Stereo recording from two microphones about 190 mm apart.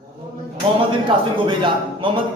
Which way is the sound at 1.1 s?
25° right (ahead or behind).